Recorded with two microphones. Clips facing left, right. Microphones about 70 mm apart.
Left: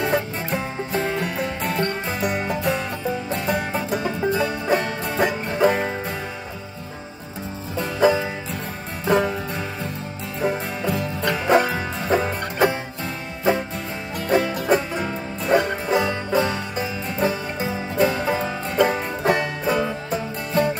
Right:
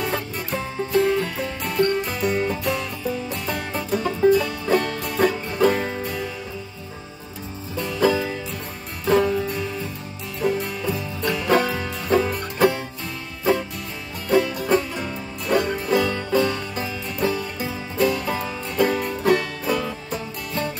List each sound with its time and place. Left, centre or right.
0.0 s music: left
7.8 s music: left